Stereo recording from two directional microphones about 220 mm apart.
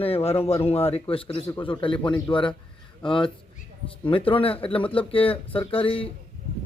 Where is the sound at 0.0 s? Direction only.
25° left (ahead or behind).